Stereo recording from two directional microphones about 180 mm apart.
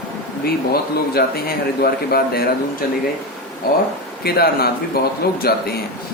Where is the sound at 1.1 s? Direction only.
60° left (ahead or behind).